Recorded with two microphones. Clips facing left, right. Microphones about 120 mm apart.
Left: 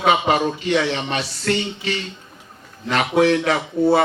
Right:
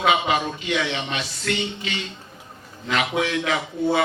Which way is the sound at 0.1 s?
35° left (ahead or behind).